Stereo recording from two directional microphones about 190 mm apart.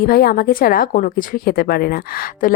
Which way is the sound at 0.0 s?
55° left (ahead or behind).